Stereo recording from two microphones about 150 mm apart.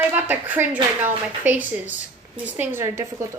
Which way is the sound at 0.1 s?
10° right (ahead or behind).